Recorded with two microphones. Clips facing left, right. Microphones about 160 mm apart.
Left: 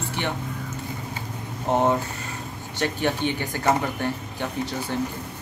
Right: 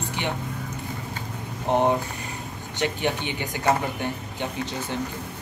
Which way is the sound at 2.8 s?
15° right (ahead or behind).